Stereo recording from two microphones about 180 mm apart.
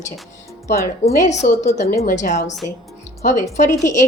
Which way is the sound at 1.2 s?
40° left (ahead or behind).